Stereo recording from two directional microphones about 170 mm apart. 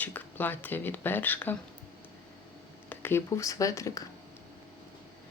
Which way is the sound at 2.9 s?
10° left (ahead or behind).